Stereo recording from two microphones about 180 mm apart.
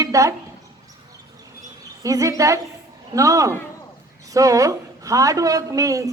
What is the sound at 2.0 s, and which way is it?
A woman's voice, 20° right (ahead or behind).